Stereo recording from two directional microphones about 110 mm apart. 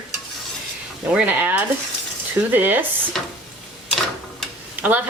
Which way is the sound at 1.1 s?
15° right (ahead or behind).